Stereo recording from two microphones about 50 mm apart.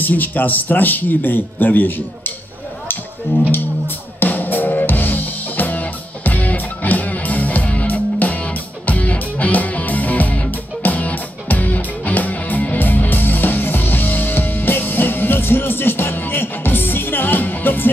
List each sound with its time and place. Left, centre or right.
0.0 s speech: left
3.5 s music: left